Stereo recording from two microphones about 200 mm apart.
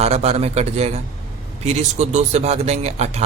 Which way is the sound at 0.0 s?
30° right (ahead or behind).